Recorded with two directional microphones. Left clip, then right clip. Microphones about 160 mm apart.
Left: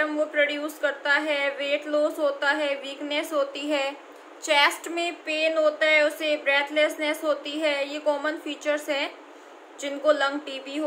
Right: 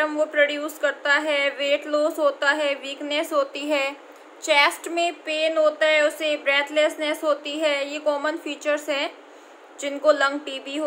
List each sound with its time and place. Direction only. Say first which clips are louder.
0.0 s speech: right 3 dB; 25° right (ahead or behind)